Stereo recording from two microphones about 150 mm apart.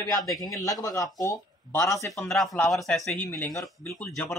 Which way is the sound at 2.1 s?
Centre (ahead or behind).